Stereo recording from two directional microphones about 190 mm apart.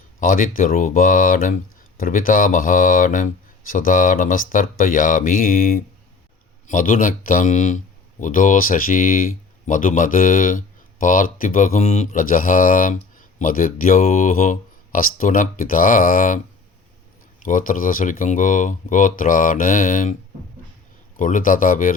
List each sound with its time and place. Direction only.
0.2 s speech: 45° left (ahead or behind)
17.4 s speech: 45° left (ahead or behind)
21.2 s speech: 45° left (ahead or behind)